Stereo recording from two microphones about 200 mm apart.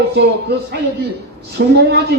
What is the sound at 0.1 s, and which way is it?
A woman's voice, 55° right (ahead or behind).